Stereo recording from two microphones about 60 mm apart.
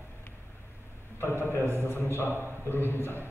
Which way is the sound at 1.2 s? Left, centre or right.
Left.